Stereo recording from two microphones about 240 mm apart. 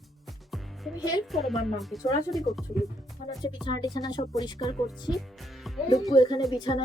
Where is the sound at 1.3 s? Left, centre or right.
Centre.